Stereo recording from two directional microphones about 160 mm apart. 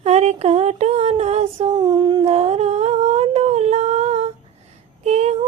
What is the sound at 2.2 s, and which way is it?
Humming, 40° right (ahead or behind).